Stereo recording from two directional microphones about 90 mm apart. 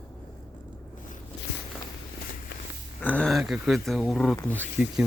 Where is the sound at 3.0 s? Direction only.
20° left (ahead or behind).